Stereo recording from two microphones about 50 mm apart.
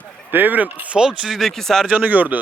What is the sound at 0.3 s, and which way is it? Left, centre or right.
Speech, right.